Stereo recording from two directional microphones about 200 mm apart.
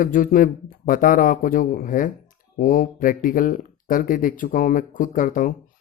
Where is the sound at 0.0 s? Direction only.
40° left (ahead or behind).